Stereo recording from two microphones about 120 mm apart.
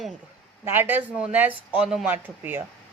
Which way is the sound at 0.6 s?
20° right (ahead or behind).